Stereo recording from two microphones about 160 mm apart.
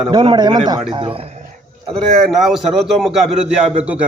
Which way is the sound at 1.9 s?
Centre (ahead or behind).